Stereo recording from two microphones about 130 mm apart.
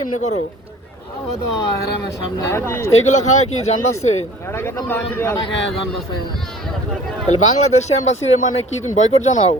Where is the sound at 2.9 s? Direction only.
65° left (ahead or behind).